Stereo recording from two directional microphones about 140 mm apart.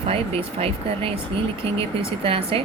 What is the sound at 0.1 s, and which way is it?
Speech, 40° right (ahead or behind).